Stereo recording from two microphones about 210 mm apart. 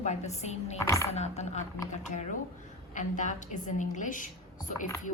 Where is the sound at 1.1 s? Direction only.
30° left (ahead or behind).